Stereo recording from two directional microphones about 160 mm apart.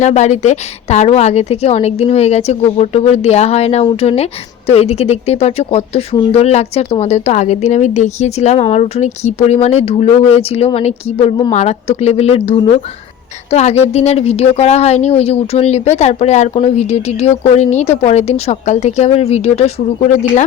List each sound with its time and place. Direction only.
0.0 s a woman's voice: 45° left (ahead or behind)